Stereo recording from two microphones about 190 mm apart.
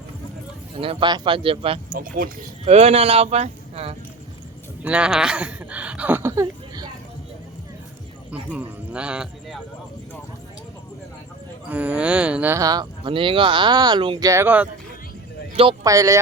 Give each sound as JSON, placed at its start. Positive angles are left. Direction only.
{"t": 0.8, "sound": "speech", "side_deg": -25}
{"t": 2.0, "sound": "speech", "side_deg": -50}
{"t": 2.6, "sound": "speech", "side_deg": -35}
{"t": 4.8, "sound": "speech", "side_deg": -5}
{"t": 8.3, "sound": "speech", "side_deg": -5}
{"t": 11.7, "sound": "speech", "side_deg": -10}
{"t": 15.8, "sound": "speech", "side_deg": -15}